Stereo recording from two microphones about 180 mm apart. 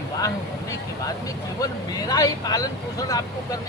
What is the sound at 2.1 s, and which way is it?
Speech, 20° left (ahead or behind).